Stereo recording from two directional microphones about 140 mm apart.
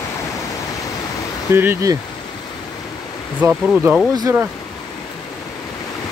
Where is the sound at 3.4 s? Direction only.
10° right (ahead or behind).